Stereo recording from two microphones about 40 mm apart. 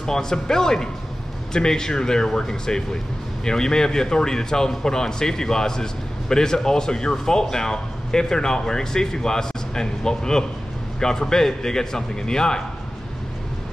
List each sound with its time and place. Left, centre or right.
0.0 s a man's voice: centre